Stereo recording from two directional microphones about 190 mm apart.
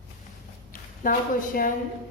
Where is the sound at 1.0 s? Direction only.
50° left (ahead or behind).